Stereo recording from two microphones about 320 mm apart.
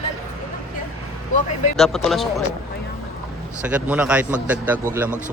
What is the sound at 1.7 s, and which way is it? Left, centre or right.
Speech, centre.